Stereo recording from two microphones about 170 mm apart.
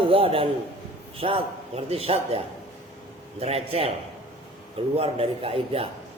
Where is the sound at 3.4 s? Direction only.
35° right (ahead or behind).